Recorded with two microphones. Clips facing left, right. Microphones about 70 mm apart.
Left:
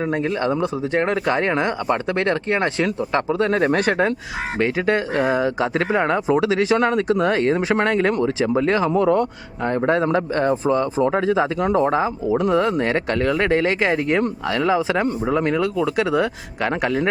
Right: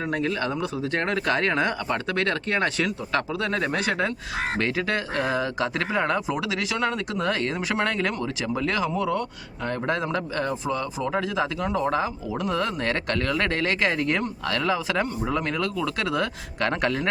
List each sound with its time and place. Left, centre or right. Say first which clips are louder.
0.1 s speech: left 5 dB; left
4.5 s speech: left 8 dB; left
11.9 s speech: left 6 dB; left